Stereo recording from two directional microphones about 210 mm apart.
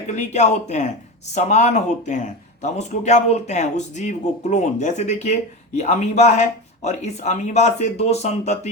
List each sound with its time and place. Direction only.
0.2 s speech: 35° left (ahead or behind)